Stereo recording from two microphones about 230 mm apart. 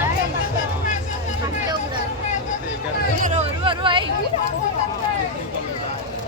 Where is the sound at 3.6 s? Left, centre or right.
Right.